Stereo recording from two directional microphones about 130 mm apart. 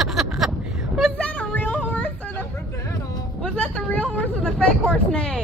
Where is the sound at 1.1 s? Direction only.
10° left (ahead or behind).